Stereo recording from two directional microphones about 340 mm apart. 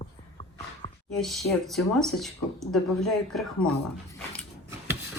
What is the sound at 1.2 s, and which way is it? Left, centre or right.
Speech, centre.